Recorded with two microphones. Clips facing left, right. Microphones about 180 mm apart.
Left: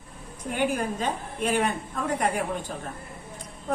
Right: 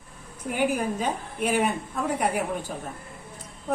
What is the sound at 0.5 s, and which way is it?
A woman's voice, 10° right (ahead or behind).